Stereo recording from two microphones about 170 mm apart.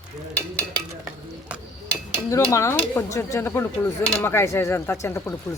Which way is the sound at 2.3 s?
15° left (ahead or behind).